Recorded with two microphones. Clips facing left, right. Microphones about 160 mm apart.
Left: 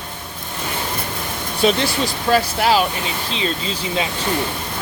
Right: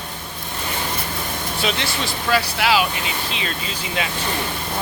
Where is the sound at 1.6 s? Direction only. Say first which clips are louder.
Left 8 dB; 40° left (ahead or behind).